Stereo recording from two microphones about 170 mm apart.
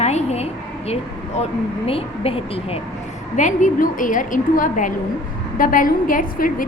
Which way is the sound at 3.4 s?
50° left (ahead or behind).